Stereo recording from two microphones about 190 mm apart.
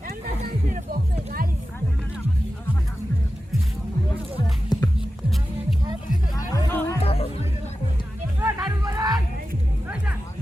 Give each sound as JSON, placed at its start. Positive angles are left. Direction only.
{"t": 4.7, "sound": "music", "side_deg": 20}
{"t": 6.3, "sound": "music", "side_deg": 20}
{"t": 7.0, "sound": "music", "side_deg": 30}
{"t": 8.4, "sound": "music", "side_deg": -15}